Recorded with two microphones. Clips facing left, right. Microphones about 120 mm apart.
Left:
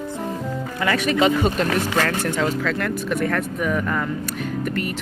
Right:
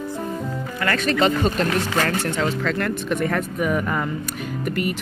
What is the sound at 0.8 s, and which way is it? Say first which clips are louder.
Speech: left 1 dB; 10° left (ahead or behind).